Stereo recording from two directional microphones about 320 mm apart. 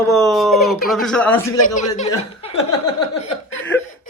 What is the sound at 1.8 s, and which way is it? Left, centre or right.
Speech, left.